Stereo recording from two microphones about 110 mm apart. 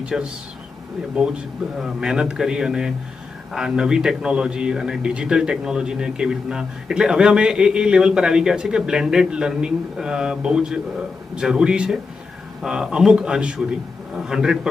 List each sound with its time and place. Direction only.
0.0 s a man's voice: 10° right (ahead or behind)
1.8 s a man's voice: 5° right (ahead or behind)